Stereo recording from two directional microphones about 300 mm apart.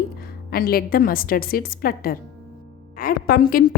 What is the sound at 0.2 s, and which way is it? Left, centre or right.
A woman's voice, left.